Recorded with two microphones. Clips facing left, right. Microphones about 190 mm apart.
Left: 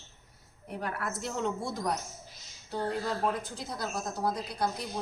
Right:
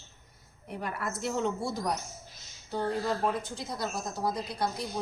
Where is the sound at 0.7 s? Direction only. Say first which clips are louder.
Even; centre (ahead or behind).